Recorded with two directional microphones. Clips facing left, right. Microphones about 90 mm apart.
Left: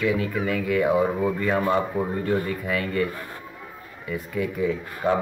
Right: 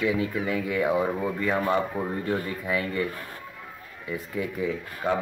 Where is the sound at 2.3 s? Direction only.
10° right (ahead or behind).